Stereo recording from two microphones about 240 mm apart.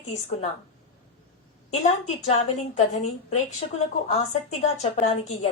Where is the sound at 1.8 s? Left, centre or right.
Left.